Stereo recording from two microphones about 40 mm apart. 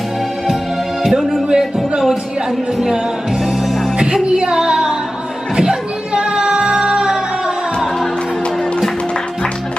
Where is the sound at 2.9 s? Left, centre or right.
Centre.